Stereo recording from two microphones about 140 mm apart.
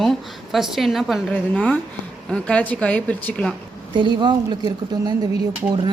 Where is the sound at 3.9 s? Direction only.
35° right (ahead or behind).